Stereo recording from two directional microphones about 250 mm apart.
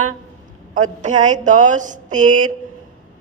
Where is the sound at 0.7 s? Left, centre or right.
Right.